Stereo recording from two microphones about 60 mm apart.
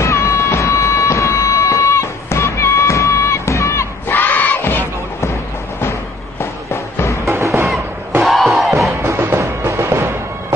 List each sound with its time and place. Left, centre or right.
0.0 s music: left
4.1 s crowd: left
6.7 s music: left
7.2 s music: right
8.2 s crowd: centre
9.0 s music: right